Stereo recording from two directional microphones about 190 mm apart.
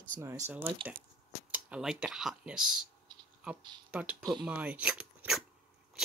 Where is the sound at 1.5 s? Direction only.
5° right (ahead or behind).